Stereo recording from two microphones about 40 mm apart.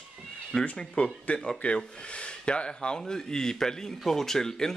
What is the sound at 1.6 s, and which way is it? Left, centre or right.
Speech, left.